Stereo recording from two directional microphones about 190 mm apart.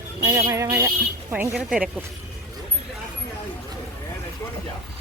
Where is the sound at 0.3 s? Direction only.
20° right (ahead or behind).